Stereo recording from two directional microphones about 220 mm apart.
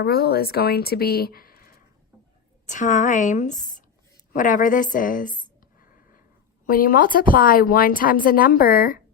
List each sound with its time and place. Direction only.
0.0 s a woman's voice: 45° left (ahead or behind)
6.7 s a woman's voice: 40° left (ahead or behind)